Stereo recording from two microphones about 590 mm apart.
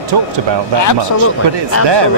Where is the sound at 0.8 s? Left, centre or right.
Left.